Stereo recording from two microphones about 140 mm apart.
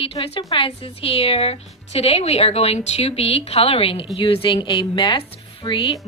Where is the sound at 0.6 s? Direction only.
40° left (ahead or behind).